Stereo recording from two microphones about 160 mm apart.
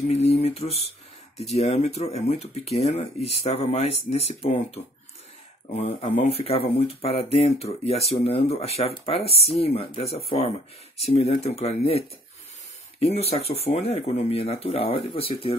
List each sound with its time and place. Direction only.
0.1 s speech: 40° left (ahead or behind)
5.8 s speech: 40° left (ahead or behind)
13.0 s speech: 40° left (ahead or behind)